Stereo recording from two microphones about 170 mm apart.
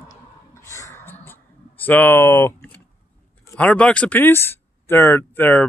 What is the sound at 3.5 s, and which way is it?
Speech, 10° left (ahead or behind).